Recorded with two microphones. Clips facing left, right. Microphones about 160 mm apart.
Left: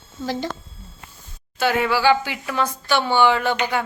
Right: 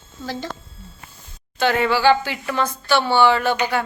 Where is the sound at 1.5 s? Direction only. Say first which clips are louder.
Right 1 dB; 5° left (ahead or behind).